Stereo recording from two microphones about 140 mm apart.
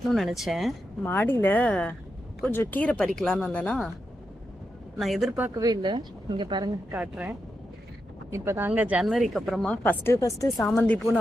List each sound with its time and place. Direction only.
0.1 s speech: centre (ahead or behind)
1.0 s speech: 15° left (ahead or behind)
4.9 s speech: centre (ahead or behind)
5.5 s speech: 30° right (ahead or behind)
6.9 s speech: 10° right (ahead or behind)
9.9 s speech: 15° left (ahead or behind)
10.8 s speech: 10° left (ahead or behind)